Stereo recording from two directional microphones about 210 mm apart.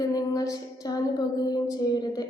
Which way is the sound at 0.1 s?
15° left (ahead or behind).